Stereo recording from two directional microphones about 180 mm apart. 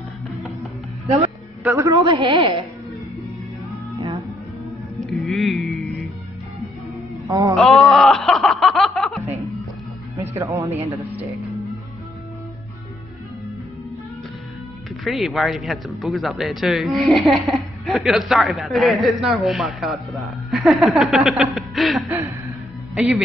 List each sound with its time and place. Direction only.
1.0 s a man's voice: 35° right (ahead or behind)
1.6 s a woman's voice: 15° right (ahead or behind)
4.9 s music: centre (ahead or behind)
7.2 s a sound: 20° right (ahead or behind)
7.5 s a sound: centre (ahead or behind)
10.3 s speech: 15° right (ahead or behind)
15.0 s a man's voice: centre (ahead or behind)